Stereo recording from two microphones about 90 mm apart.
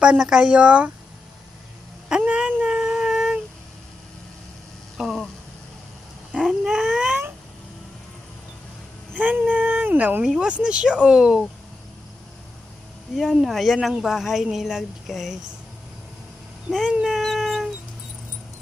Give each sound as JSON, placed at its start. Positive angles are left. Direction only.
{"t": 0.0, "sound": "speech", "side_deg": -10}
{"t": 2.0, "sound": "a sound", "side_deg": -10}
{"t": 4.9, "sound": "a sound", "side_deg": -5}
{"t": 6.3, "sound": "cat", "side_deg": -5}
{"t": 9.1, "sound": "speech", "side_deg": -20}
{"t": 10.2, "sound": "speech", "side_deg": -10}
{"t": 13.1, "sound": "speech", "side_deg": 0}
{"t": 16.9, "sound": "dog", "side_deg": -5}